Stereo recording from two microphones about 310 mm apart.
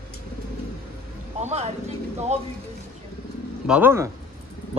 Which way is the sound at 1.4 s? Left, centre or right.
Right.